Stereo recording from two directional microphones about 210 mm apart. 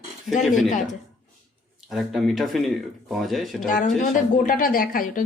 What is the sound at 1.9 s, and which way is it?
Speech, centre (ahead or behind).